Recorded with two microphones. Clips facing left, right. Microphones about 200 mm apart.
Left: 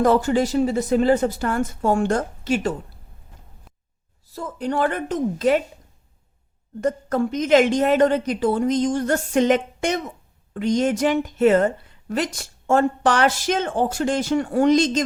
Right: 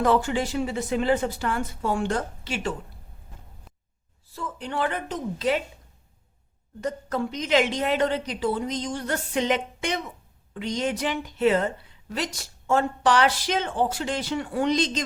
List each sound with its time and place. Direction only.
0.0 s speech: 40° left (ahead or behind)
4.3 s a woman's voice: 40° left (ahead or behind)
6.8 s a woman's voice: 50° left (ahead or behind)